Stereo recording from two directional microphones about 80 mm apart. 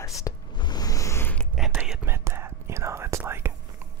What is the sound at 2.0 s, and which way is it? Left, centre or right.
Whispering, right.